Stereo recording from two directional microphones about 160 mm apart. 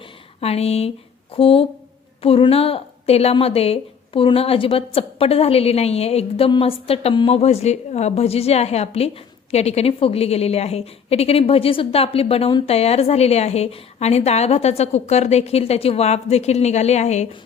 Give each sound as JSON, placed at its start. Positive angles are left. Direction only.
{"t": 0.3, "sound": "a woman's voice", "side_deg": 40}